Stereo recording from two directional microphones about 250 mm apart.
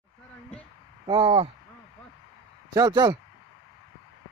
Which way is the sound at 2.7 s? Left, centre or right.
Centre.